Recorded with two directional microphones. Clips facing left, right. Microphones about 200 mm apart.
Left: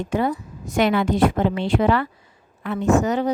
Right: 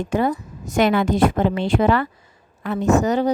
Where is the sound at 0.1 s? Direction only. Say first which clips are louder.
Right 2 dB; 45° right (ahead or behind).